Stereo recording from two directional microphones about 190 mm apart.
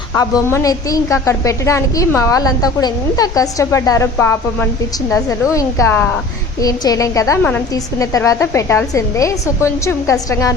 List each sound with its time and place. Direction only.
0.1 s a woman's voice: 15° left (ahead or behind)